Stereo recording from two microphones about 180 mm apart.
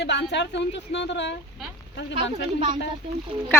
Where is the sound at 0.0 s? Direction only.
70° left (ahead or behind).